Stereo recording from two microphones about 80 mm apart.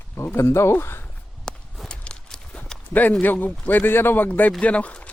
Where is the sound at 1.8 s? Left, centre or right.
Centre.